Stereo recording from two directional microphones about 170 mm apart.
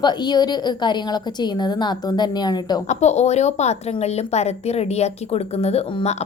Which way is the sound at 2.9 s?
40° left (ahead or behind).